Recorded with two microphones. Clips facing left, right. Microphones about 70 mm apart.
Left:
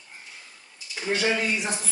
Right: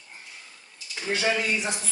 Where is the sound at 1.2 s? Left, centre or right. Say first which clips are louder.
Even; centre.